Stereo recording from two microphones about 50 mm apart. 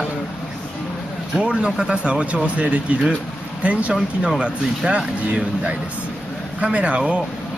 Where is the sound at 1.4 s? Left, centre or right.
Centre.